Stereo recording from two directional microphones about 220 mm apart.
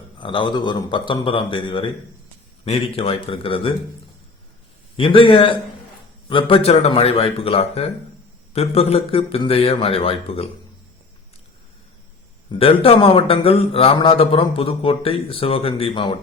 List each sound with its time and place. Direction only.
0.2 s a man's voice: 20° left (ahead or behind)
4.9 s a man's voice: 25° left (ahead or behind)
12.5 s a man's voice: 25° left (ahead or behind)